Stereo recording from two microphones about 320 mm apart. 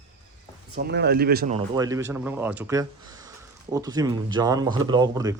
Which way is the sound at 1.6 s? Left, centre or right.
Centre.